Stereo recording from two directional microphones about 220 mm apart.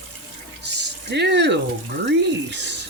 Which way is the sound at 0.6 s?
50° right (ahead or behind).